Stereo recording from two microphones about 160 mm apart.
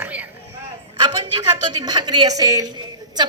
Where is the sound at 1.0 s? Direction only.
30° right (ahead or behind).